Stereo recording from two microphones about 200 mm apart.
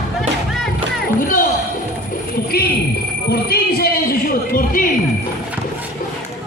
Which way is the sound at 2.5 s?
50° left (ahead or behind).